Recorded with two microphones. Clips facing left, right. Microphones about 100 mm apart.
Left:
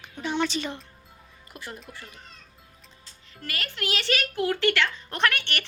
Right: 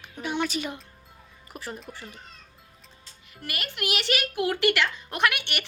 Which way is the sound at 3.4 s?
15° right (ahead or behind).